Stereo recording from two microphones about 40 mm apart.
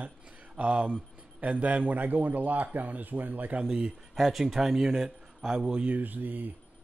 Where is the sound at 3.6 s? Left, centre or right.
Right.